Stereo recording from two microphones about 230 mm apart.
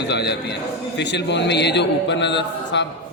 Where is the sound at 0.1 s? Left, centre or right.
Left.